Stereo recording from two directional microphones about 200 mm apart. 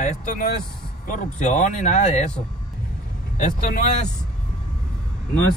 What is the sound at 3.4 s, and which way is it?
Speech, 35° left (ahead or behind).